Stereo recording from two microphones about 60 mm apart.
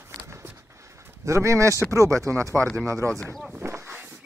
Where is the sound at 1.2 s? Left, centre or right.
Right.